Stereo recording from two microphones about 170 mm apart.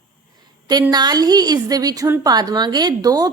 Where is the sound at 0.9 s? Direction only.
25° right (ahead or behind).